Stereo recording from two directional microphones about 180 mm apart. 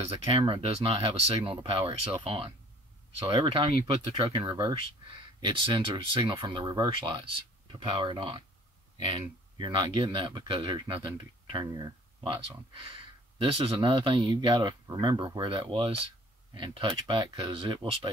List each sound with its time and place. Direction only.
0.0 s speech: 35° right (ahead or behind)
13.4 s speech: 30° right (ahead or behind)